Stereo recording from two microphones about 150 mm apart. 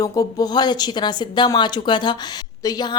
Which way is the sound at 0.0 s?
25° left (ahead or behind).